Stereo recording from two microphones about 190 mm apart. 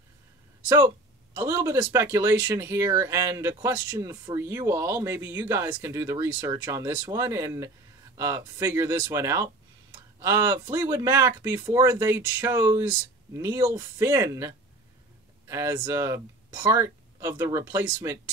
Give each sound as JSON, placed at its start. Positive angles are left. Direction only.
{"t": 0.7, "sound": "speech", "side_deg": -20}